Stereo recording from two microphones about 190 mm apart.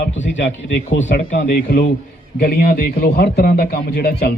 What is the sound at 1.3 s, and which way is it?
A man's voice, 45° left (ahead or behind).